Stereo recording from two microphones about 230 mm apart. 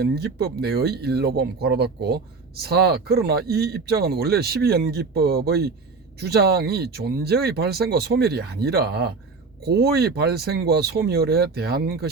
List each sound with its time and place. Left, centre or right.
0.0 s speech: right